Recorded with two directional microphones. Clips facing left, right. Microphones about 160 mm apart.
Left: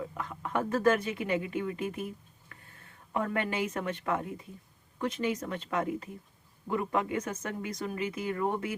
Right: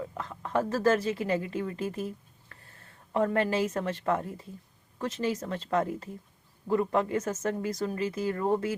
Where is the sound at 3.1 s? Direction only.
35° right (ahead or behind).